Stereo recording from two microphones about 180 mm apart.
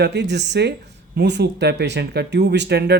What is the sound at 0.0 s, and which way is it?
Speech, 70° right (ahead or behind).